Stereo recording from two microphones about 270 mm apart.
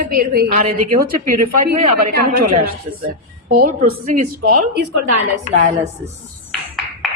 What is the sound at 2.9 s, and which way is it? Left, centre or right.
A woman's voice, right.